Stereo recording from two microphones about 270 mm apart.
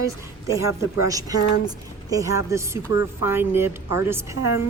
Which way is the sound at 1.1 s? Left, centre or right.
Centre.